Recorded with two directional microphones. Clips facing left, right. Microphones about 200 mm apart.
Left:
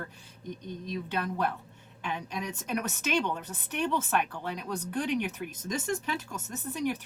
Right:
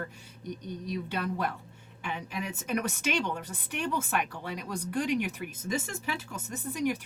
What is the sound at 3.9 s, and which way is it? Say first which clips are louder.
Speech: even; 10° right (ahead or behind).